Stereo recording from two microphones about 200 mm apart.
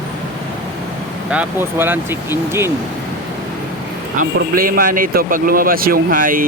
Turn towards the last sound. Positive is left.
turn(degrees=-45)  # may be behind; listen again after turning